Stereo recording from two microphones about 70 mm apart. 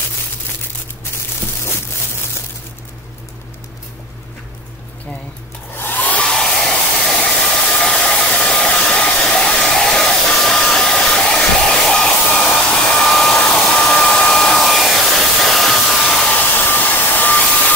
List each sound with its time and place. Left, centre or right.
5.8 s hair dryer: left
6.3 s hair dryer: centre
16.3 s hair dryer: left